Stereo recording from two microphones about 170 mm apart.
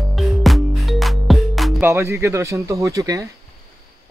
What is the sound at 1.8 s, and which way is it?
Speech, 15° right (ahead or behind).